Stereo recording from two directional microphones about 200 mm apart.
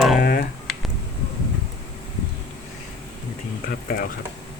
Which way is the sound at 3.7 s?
45° left (ahead or behind).